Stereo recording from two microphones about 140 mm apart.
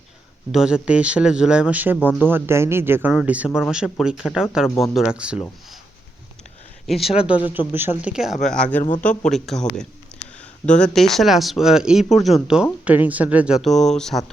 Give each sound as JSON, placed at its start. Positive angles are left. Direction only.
{"t": 0.5, "sound": "speech", "side_deg": -5}
{"t": 6.8, "sound": "speech", "side_deg": 0}